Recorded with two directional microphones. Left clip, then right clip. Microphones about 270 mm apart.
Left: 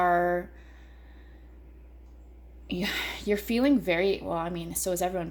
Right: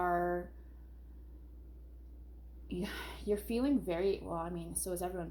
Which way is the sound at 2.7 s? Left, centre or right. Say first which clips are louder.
Left 11 dB; left.